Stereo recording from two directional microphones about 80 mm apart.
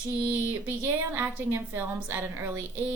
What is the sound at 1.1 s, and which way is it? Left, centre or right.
Speech, right.